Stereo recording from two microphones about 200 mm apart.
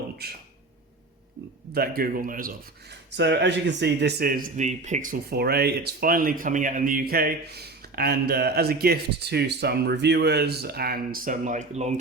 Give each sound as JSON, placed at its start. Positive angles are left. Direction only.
{"t": 0.2, "sound": "speech", "side_deg": -50}
{"t": 1.7, "sound": "speech", "side_deg": -50}